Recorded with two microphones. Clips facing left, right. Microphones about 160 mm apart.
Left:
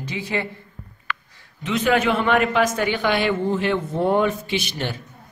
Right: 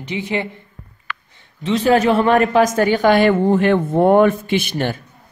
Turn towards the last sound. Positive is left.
turn(degrees=-50)  # may be behind; listen again after turning